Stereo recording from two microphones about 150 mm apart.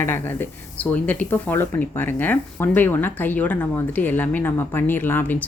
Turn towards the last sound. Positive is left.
turn(degrees=10)  # may be behind; listen again after turning